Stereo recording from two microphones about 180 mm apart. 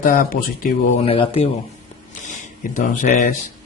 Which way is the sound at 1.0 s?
30° left (ahead or behind).